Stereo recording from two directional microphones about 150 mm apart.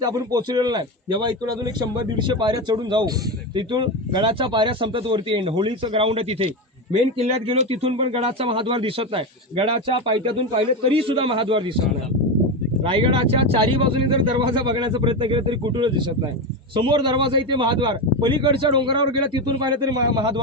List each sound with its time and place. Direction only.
0.0 s a man's voice: 25° right (ahead or behind)
12.8 s a man's voice: 35° right (ahead or behind)